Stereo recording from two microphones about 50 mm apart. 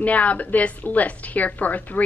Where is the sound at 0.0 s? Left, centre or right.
Left.